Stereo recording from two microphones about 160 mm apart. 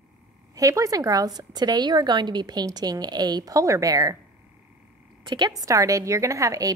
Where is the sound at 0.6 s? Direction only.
20° right (ahead or behind).